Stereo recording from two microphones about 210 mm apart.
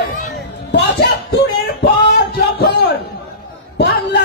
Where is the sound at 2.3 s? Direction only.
50° left (ahead or behind).